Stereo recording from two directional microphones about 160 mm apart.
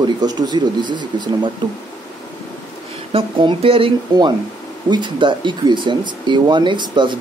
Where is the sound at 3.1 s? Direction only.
35° right (ahead or behind).